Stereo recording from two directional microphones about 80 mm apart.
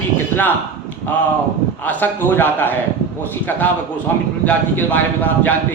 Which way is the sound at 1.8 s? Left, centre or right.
Left.